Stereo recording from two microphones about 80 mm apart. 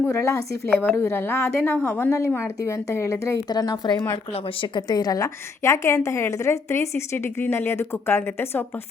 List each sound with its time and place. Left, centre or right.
0.1 s a woman's voice: left
0.7 s a woman's voice: left
3.5 s a woman's voice: left